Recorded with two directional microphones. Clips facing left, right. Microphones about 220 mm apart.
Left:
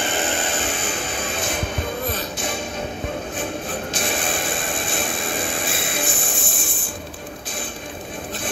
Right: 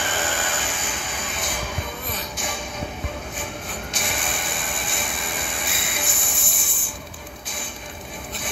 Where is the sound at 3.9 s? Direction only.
30° left (ahead or behind).